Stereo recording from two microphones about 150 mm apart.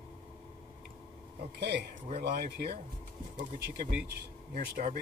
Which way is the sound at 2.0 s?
80° right.